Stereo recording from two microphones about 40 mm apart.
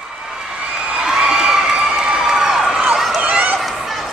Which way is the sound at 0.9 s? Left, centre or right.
Centre.